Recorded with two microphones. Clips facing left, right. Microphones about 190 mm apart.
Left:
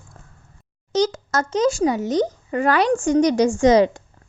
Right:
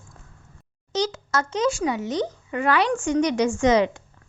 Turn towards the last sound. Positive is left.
turn(degrees=40)  # may be behind; listen again after turning